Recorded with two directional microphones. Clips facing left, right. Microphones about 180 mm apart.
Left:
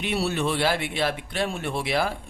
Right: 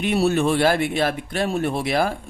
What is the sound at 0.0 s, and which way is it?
A man's voice, 45° right (ahead or behind).